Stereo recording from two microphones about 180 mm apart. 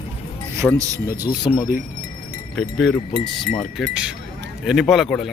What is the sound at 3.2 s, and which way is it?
Speech, 30° left (ahead or behind).